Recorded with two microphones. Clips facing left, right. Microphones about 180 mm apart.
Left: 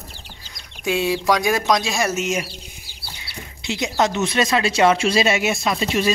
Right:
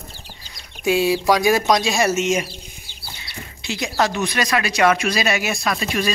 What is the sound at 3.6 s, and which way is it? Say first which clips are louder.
Speech: left 1 dB; 20° left (ahead or behind).